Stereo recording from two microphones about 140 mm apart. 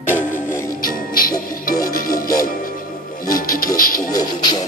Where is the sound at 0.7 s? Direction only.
90° left.